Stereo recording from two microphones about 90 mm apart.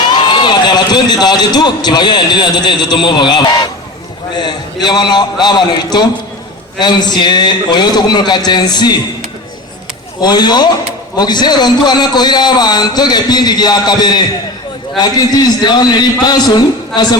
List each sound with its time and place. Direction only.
0.0 s a man's voice: 55° left (ahead or behind)
10.2 s a man's voice: 50° left (ahead or behind)